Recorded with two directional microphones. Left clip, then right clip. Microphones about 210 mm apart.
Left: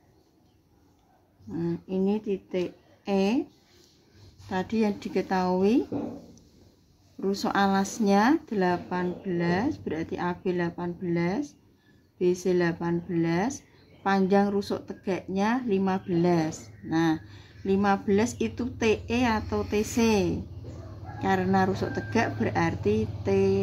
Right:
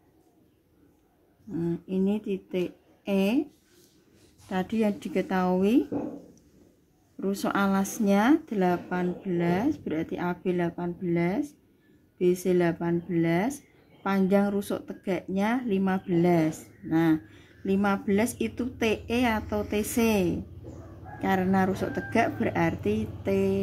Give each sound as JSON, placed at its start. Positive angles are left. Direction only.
{"t": 1.5, "sound": "speech", "side_deg": -10}
{"t": 4.5, "sound": "speech", "side_deg": -15}
{"t": 7.2, "sound": "speech", "side_deg": -15}